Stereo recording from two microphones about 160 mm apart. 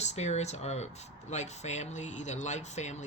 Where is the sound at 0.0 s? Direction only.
45° left (ahead or behind).